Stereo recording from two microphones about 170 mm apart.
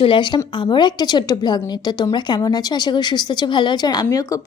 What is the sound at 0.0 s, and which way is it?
Speech, 30° left (ahead or behind).